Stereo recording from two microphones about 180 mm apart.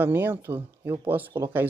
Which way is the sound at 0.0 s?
10° right (ahead or behind).